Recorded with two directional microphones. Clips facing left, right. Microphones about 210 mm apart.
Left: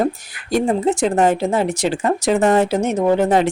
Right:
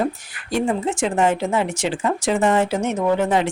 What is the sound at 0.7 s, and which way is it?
Speech, 40° left (ahead or behind).